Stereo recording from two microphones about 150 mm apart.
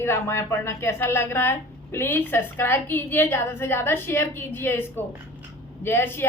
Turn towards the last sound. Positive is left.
turn(degrees=15)  # may be behind; listen again after turning